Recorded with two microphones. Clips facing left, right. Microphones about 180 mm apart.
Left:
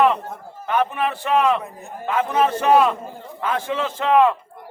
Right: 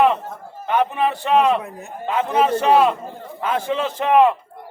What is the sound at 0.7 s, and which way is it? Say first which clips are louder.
A man's voice: right 2 dB; 20° right (ahead or behind).